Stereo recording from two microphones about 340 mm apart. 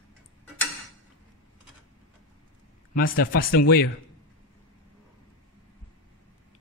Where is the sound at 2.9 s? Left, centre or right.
Left.